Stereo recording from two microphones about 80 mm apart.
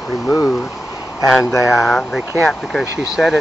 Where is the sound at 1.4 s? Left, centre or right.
Left.